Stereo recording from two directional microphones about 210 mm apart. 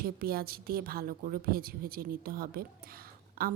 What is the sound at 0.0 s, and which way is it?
A woman's voice, 45° right (ahead or behind).